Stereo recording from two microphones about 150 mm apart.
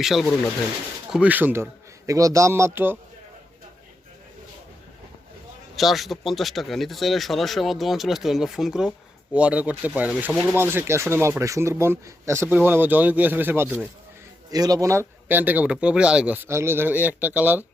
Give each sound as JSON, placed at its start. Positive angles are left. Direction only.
{"t": 0.0, "sound": "speech", "side_deg": 0}
{"t": 5.7, "sound": "speech", "side_deg": 0}
{"t": 14.5, "sound": "speech", "side_deg": -25}